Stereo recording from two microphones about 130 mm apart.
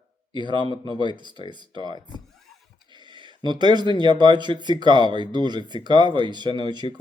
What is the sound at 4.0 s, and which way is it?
Speech, 35° right (ahead or behind).